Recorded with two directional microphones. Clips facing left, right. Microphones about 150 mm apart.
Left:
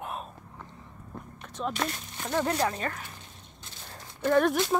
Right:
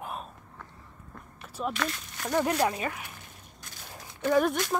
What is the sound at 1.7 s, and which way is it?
Speech, 35° left (ahead or behind).